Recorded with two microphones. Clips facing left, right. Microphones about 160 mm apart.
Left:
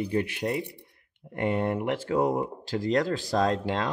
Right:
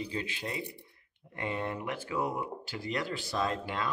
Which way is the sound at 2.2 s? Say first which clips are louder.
Left 8 dB; 90° left.